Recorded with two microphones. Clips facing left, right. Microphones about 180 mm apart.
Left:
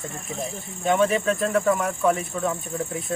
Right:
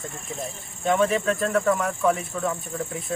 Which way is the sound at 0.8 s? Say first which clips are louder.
Left 1 dB; centre (ahead or behind).